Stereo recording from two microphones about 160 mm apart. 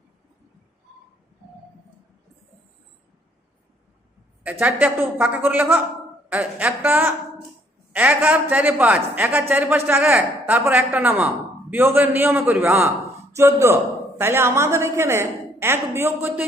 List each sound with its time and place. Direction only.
4.6 s a man's voice: 10° right (ahead or behind)